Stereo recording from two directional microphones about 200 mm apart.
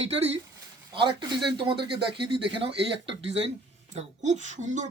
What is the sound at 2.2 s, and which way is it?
Speech, 60° right (ahead or behind).